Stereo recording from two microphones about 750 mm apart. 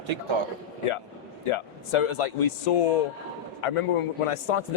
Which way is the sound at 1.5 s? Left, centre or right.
Left.